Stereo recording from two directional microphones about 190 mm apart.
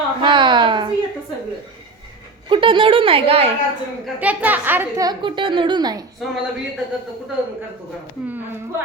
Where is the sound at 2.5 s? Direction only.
25° right (ahead or behind).